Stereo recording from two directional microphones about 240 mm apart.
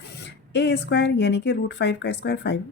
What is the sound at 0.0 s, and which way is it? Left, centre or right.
Speech, left.